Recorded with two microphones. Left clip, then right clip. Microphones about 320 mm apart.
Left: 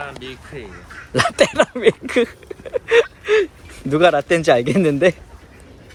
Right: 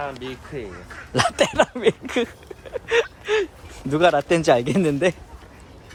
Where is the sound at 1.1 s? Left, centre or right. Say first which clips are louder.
Left 4 dB; centre.